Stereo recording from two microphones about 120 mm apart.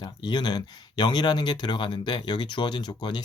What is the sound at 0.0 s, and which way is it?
Speech, 40° left (ahead or behind).